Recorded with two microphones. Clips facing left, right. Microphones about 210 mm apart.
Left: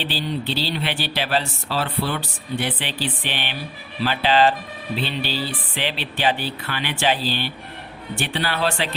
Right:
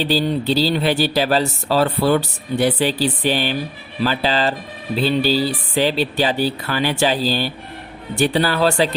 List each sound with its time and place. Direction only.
0.0 s speech: 40° right (ahead or behind)